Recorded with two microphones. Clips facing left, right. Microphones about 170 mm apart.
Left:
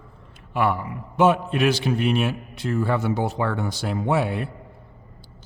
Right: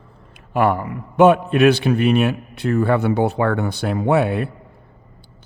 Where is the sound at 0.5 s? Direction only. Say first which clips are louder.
Right 5 dB; 50° right (ahead or behind).